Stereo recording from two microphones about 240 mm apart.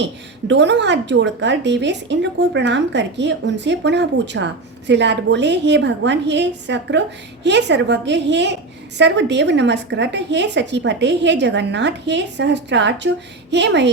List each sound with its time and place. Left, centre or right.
0.0 s a woman's voice: right